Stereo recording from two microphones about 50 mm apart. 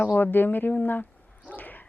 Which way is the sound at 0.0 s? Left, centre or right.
Left.